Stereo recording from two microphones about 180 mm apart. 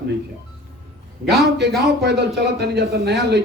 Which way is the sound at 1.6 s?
70° right (ahead or behind).